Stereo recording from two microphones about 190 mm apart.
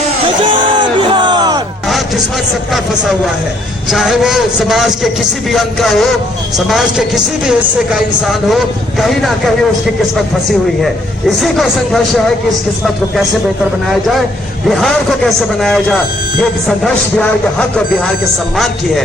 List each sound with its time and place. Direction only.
0.4 s music: 25° right (ahead or behind)
2.7 s speech: centre (ahead or behind)
11.3 s speech: centre (ahead or behind)
14.7 s speech: centre (ahead or behind)